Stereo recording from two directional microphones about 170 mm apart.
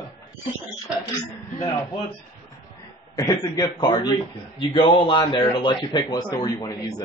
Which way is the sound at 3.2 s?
20° left (ahead or behind).